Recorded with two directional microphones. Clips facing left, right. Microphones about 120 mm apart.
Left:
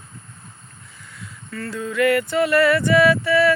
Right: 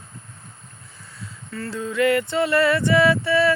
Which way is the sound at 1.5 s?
25° right (ahead or behind).